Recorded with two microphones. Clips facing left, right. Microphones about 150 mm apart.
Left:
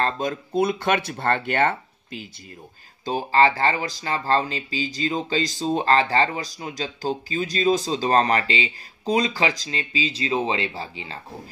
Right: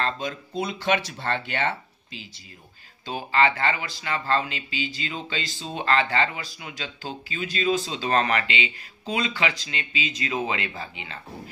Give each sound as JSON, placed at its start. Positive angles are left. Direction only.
{"t": 0.0, "sound": "speech", "side_deg": 45}
{"t": 3.1, "sound": "speech", "side_deg": 40}